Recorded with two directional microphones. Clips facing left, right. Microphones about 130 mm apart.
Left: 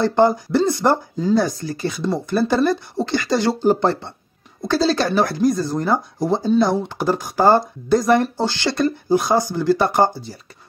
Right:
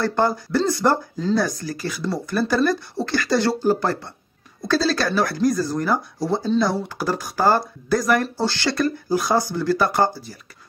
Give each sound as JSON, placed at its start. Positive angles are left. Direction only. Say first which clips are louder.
{"t": 0.0, "sound": "speech", "louder": "left 5 dB", "side_deg": 20}